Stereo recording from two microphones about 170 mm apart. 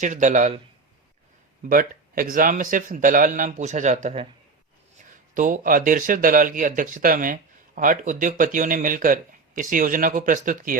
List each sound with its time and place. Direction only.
0.0 s speech: 45° right (ahead or behind)
1.7 s speech: 55° right (ahead or behind)
5.3 s speech: 50° right (ahead or behind)